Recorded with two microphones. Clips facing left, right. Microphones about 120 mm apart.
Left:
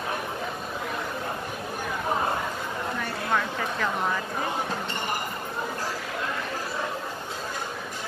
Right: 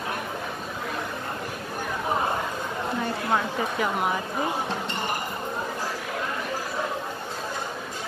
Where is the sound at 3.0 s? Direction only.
20° right (ahead or behind).